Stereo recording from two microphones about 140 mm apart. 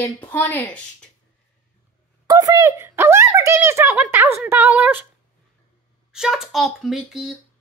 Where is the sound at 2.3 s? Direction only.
25° right (ahead or behind).